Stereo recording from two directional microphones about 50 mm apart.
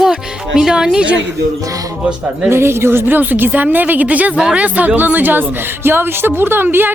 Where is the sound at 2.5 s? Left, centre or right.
Right.